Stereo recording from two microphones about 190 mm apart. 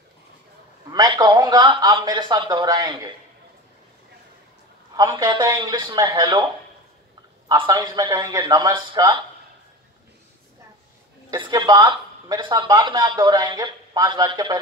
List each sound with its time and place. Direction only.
0.9 s speech: 20° right (ahead or behind)
4.9 s speech: 20° right (ahead or behind)
7.4 s speech: 20° right (ahead or behind)
11.2 s speech: 20° right (ahead or behind)